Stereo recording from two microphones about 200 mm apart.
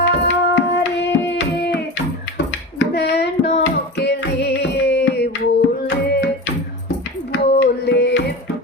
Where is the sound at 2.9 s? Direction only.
55° left (ahead or behind).